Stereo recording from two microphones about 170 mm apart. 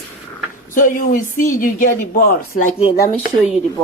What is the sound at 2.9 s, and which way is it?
Speech, 60° left (ahead or behind).